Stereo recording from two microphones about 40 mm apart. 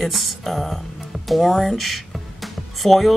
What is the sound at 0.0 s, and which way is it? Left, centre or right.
Speech, centre.